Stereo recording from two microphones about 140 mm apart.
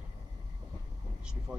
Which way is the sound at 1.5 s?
5° right (ahead or behind).